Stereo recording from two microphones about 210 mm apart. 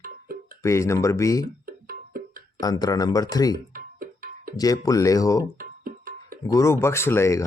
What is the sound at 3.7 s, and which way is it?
Music, 45° right (ahead or behind).